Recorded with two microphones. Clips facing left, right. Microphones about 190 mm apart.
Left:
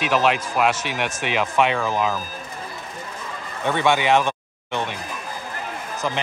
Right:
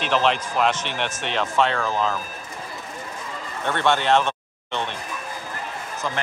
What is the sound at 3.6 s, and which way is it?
Speech, 10° left (ahead or behind).